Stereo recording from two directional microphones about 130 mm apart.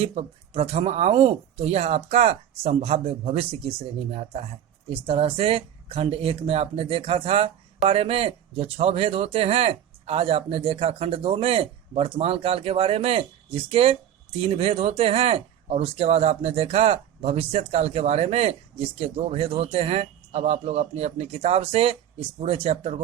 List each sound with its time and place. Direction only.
0.0 s speech: 55° right (ahead or behind)